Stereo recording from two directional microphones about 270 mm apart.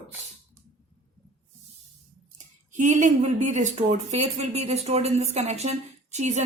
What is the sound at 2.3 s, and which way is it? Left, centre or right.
Speech, right.